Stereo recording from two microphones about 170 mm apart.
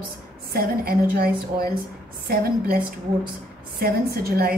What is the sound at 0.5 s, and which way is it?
A woman's voice, 60° right (ahead or behind).